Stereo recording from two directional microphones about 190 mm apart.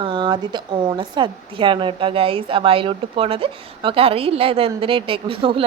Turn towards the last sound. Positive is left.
turn(degrees=-30)  # may be behind; listen again after turning